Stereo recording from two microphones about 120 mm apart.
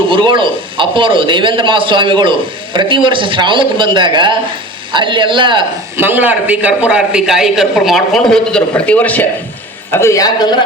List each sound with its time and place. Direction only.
0.1 s a man's voice: 45° right (ahead or behind)
6.0 s a man's voice: 15° right (ahead or behind); by 9.2 s 10° left (ahead or behind)
9.9 s a woman's voice: 25° left (ahead or behind)